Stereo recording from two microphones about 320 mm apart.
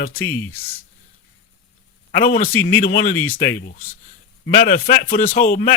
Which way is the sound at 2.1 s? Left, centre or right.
Left.